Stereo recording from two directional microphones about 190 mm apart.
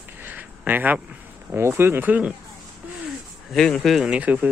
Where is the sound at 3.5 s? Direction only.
5° left (ahead or behind).